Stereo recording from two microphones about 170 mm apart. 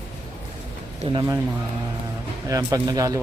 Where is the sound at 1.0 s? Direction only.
30° right (ahead or behind).